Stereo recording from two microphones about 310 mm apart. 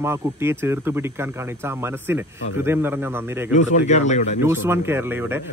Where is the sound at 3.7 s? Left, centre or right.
Left.